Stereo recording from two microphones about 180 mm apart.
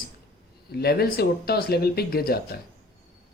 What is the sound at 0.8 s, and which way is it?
Speech, 60° left (ahead or behind).